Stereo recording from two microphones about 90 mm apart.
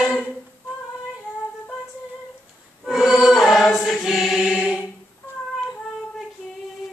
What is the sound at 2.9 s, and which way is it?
Choir, 5° right (ahead or behind).